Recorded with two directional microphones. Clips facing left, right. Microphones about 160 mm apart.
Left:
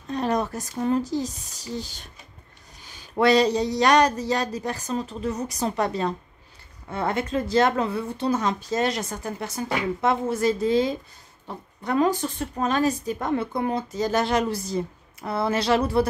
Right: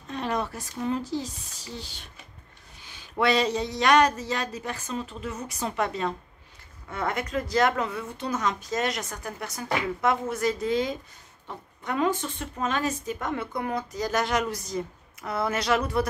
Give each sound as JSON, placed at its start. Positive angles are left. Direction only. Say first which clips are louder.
{"t": 0.1, "sound": "speech", "louder": "left 5 dB", "side_deg": 40}
{"t": 3.2, "sound": "a woman's voice", "louder": "left 5 dB", "side_deg": 35}